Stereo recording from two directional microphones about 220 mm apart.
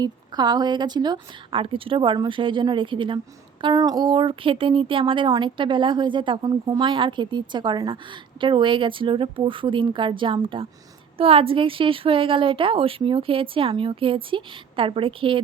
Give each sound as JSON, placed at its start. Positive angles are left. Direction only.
{"t": 0.0, "sound": "speech", "side_deg": -20}